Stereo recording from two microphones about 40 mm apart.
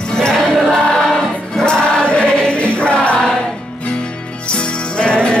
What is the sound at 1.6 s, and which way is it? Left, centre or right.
Music, left.